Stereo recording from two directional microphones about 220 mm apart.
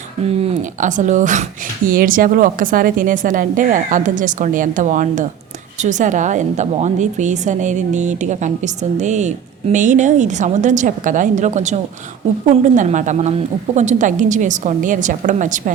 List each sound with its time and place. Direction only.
0.4 s a woman's voice: 35° right (ahead or behind)